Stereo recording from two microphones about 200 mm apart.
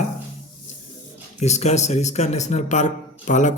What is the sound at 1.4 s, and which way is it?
A man's voice, 35° left (ahead or behind).